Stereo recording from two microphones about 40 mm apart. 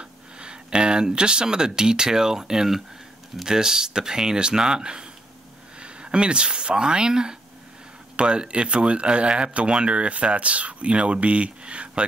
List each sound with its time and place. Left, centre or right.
0.0 s speech: right